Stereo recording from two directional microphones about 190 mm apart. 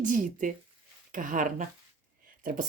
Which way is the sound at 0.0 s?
45° right (ahead or behind).